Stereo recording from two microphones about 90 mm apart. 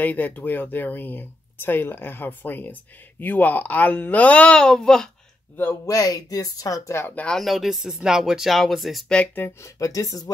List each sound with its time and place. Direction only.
0.0 s speech: 20° left (ahead or behind)
5.9 s speech: 40° left (ahead or behind)
7.1 s speech: 15° left (ahead or behind)
7.3 s speech: centre (ahead or behind)
9.1 s speech: 20° left (ahead or behind)
9.6 s speech: 40° left (ahead or behind)